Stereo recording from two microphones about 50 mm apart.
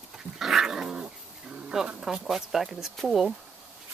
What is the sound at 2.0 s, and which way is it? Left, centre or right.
Speech, centre.